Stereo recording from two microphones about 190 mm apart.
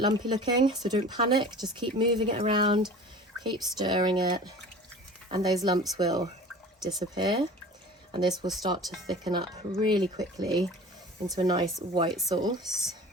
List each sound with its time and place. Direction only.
0.0 s speech: 25° right (ahead or behind)